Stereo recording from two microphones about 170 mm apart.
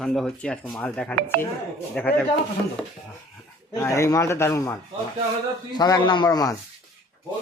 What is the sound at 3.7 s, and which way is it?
Speech, 15° left (ahead or behind).